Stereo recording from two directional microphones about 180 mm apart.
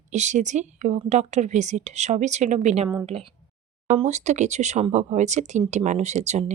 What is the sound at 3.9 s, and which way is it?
Speech, 40° right (ahead or behind).